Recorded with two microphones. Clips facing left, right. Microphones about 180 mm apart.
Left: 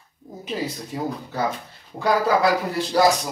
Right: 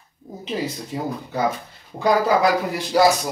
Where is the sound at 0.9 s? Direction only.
20° right (ahead or behind).